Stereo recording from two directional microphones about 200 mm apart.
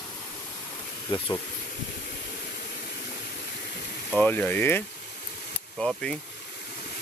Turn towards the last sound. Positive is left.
turn(degrees=5)  # may be behind; listen again after turning